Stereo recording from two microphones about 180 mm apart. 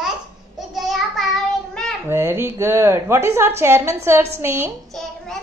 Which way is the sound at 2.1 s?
15° right (ahead or behind).